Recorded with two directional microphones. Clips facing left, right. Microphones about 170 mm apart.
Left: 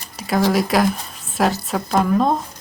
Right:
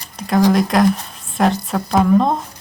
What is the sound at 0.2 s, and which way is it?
Speech, 5° left (ahead or behind).